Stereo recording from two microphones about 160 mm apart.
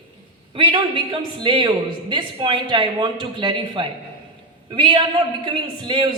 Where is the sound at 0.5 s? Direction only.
30° right (ahead or behind).